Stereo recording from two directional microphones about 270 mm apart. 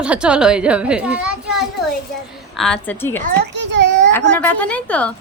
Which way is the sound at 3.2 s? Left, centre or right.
Right.